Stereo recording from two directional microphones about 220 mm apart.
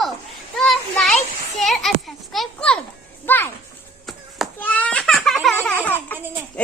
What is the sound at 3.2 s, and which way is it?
Music, 10° left (ahead or behind).